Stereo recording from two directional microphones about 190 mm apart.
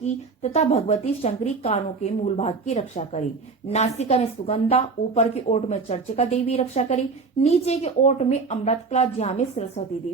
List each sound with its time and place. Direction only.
0.0 s a woman's voice: 35° left (ahead or behind)